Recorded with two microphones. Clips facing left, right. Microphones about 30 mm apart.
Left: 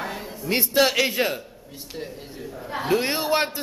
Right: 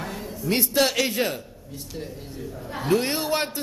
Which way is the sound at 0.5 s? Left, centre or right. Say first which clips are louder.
Left 2 dB; centre.